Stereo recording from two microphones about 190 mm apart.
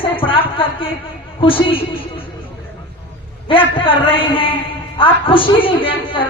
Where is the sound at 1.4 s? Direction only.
25° left (ahead or behind).